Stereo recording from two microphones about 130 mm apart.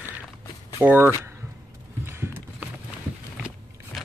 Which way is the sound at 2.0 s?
20° right (ahead or behind).